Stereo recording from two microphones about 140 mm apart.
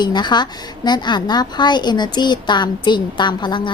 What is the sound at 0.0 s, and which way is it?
A woman's voice, 30° left (ahead or behind).